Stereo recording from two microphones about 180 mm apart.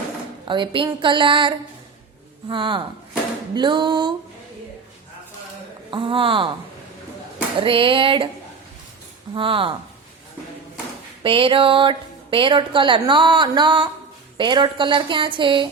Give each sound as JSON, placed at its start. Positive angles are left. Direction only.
{"t": 0.4, "sound": "a woman's voice", "side_deg": -25}
{"t": 5.9, "sound": "a woman's voice", "side_deg": -30}
{"t": 7.6, "sound": "a woman's voice", "side_deg": -30}
{"t": 9.3, "sound": "a woman's voice", "side_deg": -30}
{"t": 11.2, "sound": "a woman's voice", "side_deg": -30}